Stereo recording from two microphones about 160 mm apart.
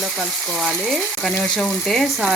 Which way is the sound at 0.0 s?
Centre (ahead or behind).